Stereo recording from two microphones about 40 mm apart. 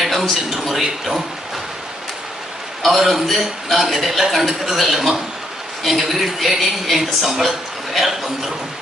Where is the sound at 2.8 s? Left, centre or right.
Centre.